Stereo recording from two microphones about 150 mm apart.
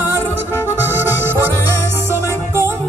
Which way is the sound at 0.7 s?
15° right (ahead or behind).